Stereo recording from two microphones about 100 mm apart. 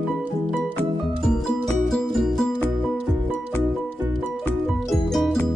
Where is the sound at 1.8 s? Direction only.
Centre (ahead or behind).